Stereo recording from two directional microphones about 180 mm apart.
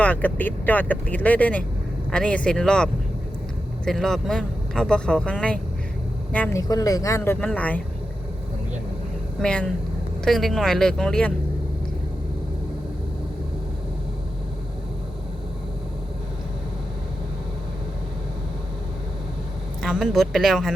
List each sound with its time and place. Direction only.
0.0 s speech: 5° left (ahead or behind)
6.6 s speech: 20° left (ahead or behind)
9.4 s speech: 5° left (ahead or behind)
19.8 s speech: centre (ahead or behind)